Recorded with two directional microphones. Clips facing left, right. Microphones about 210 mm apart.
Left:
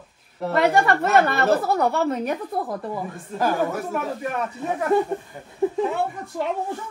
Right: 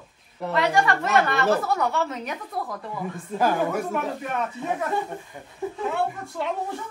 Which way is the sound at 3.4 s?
Centre (ahead or behind).